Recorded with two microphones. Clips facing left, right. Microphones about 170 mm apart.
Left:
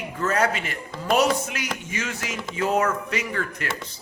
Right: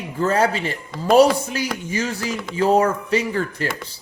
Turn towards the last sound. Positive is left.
turn(degrees=-30)  # may be behind; listen again after turning